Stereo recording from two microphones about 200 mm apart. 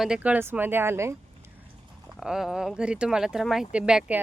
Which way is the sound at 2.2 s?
Centre (ahead or behind).